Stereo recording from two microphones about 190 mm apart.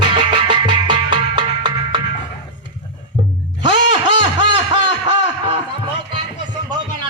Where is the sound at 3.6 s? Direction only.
25° right (ahead or behind).